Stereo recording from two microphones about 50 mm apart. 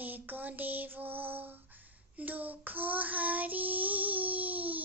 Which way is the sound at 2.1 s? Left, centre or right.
Right.